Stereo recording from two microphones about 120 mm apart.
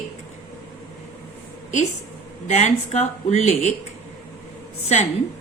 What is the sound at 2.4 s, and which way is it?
Speech, 75° left (ahead or behind).